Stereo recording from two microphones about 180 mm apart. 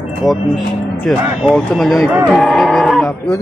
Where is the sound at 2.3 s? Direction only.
Centre (ahead or behind).